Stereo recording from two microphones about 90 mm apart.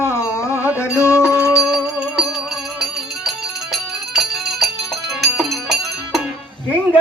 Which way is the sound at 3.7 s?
Centre (ahead or behind).